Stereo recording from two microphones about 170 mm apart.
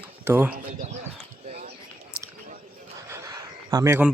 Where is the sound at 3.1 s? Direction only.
20° right (ahead or behind).